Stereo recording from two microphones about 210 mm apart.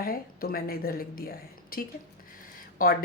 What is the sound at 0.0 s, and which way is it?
Speech, 45° left (ahead or behind).